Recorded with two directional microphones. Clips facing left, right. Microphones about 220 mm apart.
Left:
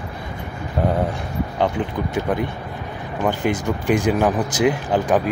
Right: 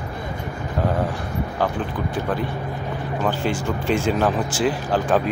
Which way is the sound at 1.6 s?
20° left (ahead or behind).